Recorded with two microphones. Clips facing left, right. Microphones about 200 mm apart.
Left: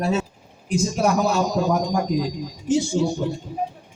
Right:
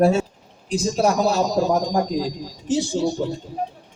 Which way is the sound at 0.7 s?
30° right (ahead or behind).